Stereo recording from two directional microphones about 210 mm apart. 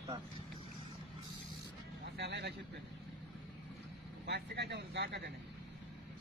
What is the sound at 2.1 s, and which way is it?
Vehicle, 55° right (ahead or behind).